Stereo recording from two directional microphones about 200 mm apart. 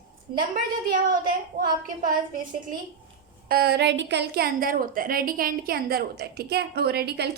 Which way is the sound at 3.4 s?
50° right (ahead or behind).